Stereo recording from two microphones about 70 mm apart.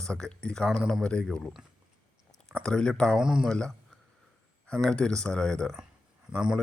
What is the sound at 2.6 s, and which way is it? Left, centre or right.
Speech, centre.